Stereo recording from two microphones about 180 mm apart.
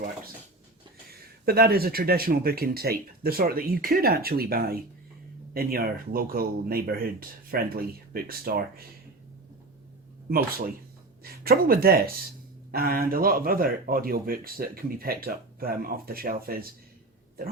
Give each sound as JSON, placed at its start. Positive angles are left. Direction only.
{"t": 1.5, "sound": "speech", "side_deg": -55}
{"t": 10.2, "sound": "speech", "side_deg": -55}